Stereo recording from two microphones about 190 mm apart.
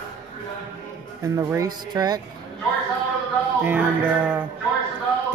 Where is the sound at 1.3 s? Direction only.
20° right (ahead or behind).